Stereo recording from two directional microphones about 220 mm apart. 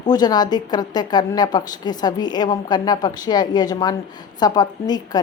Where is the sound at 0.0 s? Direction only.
20° left (ahead or behind).